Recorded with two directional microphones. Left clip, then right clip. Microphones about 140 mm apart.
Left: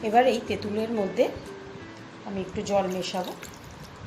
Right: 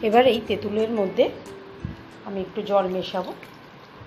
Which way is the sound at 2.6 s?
30° right (ahead or behind).